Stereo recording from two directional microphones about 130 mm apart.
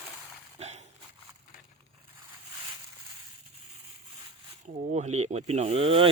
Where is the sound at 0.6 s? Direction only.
55° right (ahead or behind).